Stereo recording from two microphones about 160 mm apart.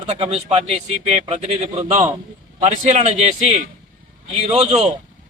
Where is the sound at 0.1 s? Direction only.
45° right (ahead or behind).